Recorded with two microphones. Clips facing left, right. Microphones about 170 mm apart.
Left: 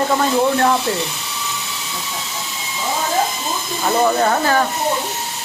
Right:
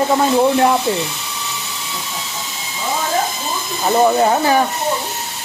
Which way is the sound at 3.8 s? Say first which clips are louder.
Right 3 dB; 15° right (ahead or behind).